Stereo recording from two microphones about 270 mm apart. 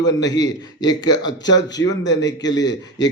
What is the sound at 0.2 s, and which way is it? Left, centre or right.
Speech, centre.